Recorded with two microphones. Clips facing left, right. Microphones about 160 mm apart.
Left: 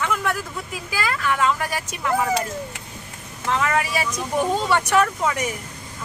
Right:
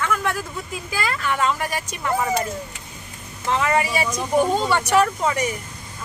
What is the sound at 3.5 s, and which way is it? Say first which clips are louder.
A woman's voice: right 2 dB; 5° right (ahead or behind).